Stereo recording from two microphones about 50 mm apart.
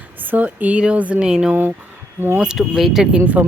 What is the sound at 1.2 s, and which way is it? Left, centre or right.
Speech, centre.